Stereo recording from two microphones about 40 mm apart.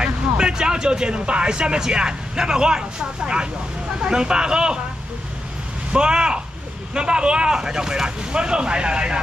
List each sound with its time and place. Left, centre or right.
0.0 s speech: centre
5.9 s speech: right